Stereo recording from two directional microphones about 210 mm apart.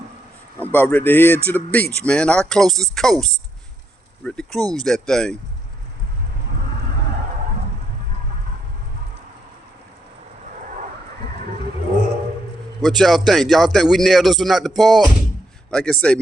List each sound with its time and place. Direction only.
0.6 s a man's voice: 10° left (ahead or behind)
12.8 s speech: centre (ahead or behind)